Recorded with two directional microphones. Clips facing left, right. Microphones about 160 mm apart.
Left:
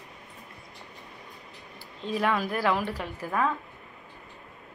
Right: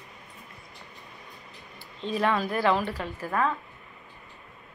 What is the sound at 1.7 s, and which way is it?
A woman's voice, 10° left (ahead or behind).